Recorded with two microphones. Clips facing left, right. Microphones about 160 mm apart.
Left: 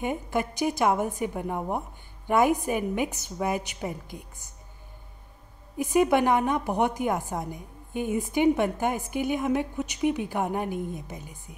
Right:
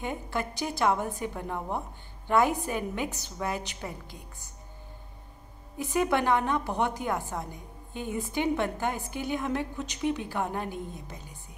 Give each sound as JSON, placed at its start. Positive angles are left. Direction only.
{"t": 0.0, "sound": "a woman's voice", "side_deg": 15}
{"t": 5.9, "sound": "a woman's voice", "side_deg": 15}